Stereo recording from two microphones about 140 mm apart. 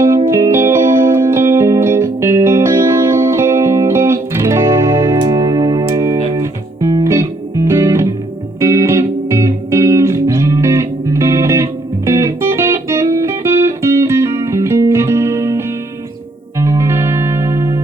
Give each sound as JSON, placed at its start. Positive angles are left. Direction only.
{"t": 0.3, "sound": "music", "side_deg": -20}